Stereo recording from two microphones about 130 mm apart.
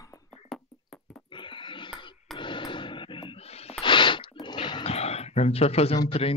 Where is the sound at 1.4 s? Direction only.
40° left (ahead or behind).